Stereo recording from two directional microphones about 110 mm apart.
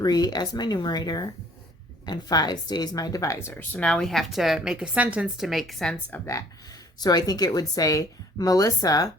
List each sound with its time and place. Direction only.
0.0 s a woman's voice: 40° left (ahead or behind)
3.5 s a woman's voice: 15° left (ahead or behind)
7.0 s a woman's voice: 35° left (ahead or behind)